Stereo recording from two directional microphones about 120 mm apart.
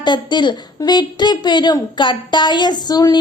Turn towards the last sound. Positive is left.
turn(degrees=35)  # may be behind; listen again after turning